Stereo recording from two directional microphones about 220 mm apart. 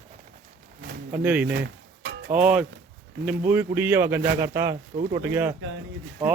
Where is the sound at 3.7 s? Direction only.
10° right (ahead or behind).